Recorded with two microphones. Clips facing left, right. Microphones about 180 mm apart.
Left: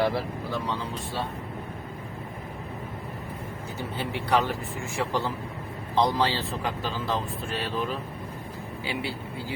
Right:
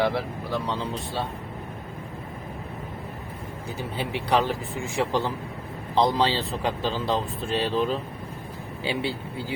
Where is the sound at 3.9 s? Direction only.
15° right (ahead or behind).